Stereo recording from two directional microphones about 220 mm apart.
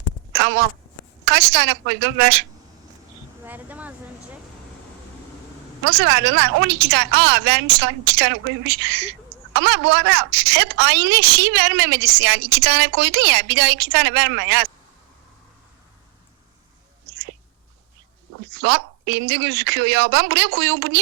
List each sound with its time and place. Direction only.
0.3 s a sound: 50° right (ahead or behind)
1.2 s a woman's voice: 50° right (ahead or behind)
3.4 s insect: 10° right (ahead or behind)
5.8 s a woman's voice: 50° right (ahead or behind)
18.4 s a woman's voice: 50° right (ahead or behind)